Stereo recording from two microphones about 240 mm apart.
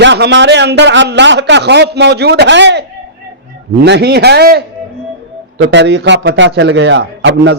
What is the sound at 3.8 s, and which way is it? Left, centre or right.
A man's voice, right.